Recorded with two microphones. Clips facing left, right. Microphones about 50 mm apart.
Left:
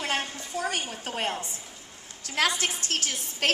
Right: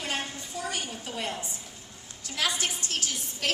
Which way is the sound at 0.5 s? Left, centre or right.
Left.